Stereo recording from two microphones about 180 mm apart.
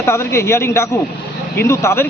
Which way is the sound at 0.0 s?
15° left (ahead or behind).